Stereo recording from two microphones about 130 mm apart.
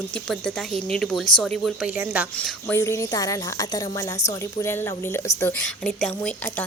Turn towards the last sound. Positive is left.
turn(degrees=10)  # may be behind; listen again after turning